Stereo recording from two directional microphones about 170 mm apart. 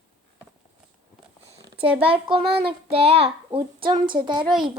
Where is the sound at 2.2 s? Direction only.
35° right (ahead or behind).